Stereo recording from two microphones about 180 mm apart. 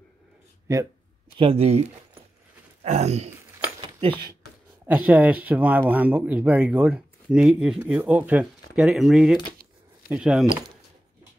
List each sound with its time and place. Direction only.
1.4 s speech: 30° right (ahead or behind)
3.8 s a sound: 25° right (ahead or behind)
4.8 s speech: 10° right (ahead or behind)